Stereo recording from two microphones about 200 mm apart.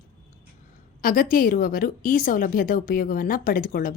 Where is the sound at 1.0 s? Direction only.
45° left (ahead or behind).